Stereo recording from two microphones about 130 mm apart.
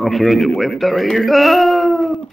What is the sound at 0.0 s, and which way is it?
Speech, centre (ahead or behind).